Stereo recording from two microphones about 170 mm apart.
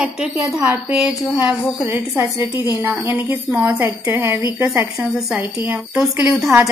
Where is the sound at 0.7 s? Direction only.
5° right (ahead or behind).